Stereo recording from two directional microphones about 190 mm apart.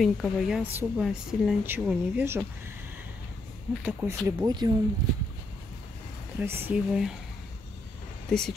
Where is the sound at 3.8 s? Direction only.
20° right (ahead or behind).